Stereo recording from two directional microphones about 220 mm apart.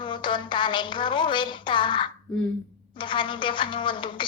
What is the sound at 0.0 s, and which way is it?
Speech, 20° left (ahead or behind).